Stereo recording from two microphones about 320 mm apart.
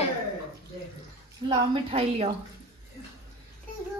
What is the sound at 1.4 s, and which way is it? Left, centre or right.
Speech, centre.